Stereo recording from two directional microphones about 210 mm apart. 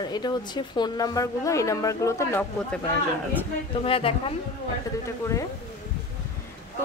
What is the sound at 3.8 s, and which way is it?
Speech, 25° left (ahead or behind).